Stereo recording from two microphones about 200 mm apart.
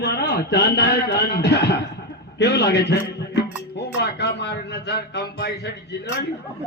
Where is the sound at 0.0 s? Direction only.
50° left (ahead or behind).